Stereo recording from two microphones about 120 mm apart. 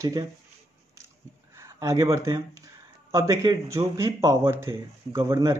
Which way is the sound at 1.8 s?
30° right (ahead or behind).